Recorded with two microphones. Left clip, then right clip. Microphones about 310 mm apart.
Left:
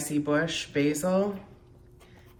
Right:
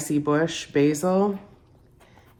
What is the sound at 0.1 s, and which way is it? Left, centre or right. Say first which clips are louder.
Speech: right 4 dB; right.